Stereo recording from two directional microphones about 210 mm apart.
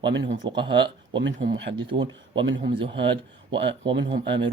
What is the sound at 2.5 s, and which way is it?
Speech, 60° right (ahead or behind).